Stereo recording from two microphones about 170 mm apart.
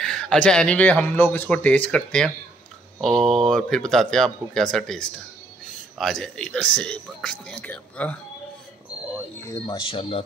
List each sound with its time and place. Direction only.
0.0 s speech: 5° left (ahead or behind)
9.5 s speech: 25° left (ahead or behind)